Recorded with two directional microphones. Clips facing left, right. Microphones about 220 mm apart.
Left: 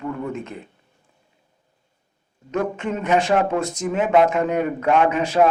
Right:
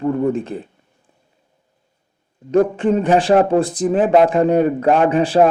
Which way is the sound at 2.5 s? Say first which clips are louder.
Right 9 dB; 35° right (ahead or behind).